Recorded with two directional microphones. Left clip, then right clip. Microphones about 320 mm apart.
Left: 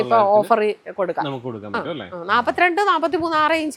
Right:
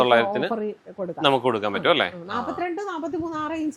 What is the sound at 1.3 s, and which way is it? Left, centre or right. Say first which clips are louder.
Speech: right 6 dB; centre.